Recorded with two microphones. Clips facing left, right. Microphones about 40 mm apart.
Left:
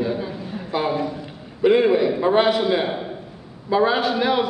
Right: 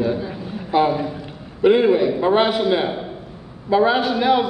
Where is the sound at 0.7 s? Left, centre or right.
Centre.